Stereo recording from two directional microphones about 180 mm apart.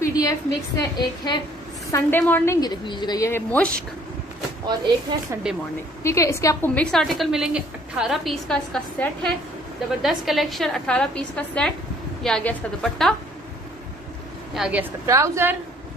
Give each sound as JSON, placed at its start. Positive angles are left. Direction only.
{"t": 0.0, "sound": "a woman's voice", "side_deg": 20}
{"t": 5.3, "sound": "a woman's voice", "side_deg": -15}
{"t": 6.0, "sound": "a woman's voice", "side_deg": 15}
{"t": 14.5, "sound": "a woman's voice", "side_deg": -5}